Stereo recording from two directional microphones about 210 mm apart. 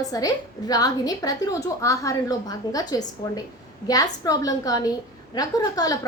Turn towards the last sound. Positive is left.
turn(degrees=15)  # may be behind; listen again after turning